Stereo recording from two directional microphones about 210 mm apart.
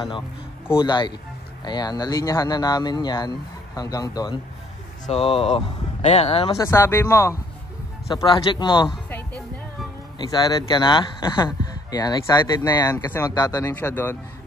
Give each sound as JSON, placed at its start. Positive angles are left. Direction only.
{"t": 0.7, "sound": "speech", "side_deg": 20}
{"t": 6.5, "sound": "speech", "side_deg": 15}
{"t": 10.1, "sound": "speech", "side_deg": 20}